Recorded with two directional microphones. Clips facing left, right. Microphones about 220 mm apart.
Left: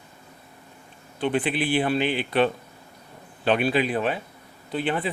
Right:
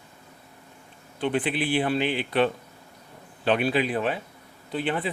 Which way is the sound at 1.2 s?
10° left (ahead or behind).